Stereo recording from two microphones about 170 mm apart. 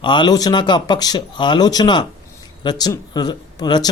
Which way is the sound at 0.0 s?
25° left (ahead or behind).